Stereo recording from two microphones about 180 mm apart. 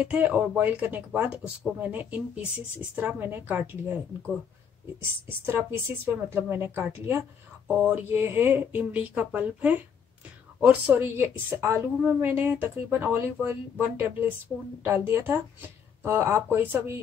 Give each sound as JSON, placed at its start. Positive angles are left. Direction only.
{"t": 0.0, "sound": "speech", "side_deg": -5}
{"t": 5.4, "sound": "speech", "side_deg": -10}